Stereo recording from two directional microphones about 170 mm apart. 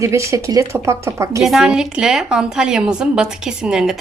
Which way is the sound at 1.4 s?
5° right (ahead or behind).